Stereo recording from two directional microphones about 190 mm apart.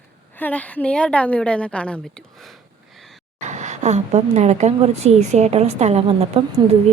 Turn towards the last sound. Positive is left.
turn(degrees=-35)  # may be behind; listen again after turning